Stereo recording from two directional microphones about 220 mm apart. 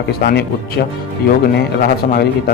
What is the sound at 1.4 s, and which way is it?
A man's voice, 40° left (ahead or behind).